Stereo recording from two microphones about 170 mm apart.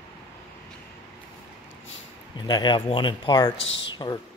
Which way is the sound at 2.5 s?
25° left (ahead or behind).